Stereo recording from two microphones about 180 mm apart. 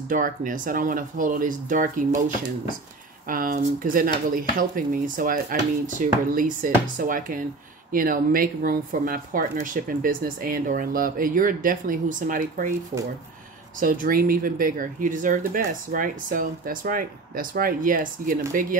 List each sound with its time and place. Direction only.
0.1 s speech: 50° right (ahead or behind)
13.7 s speech: 50° right (ahead or behind)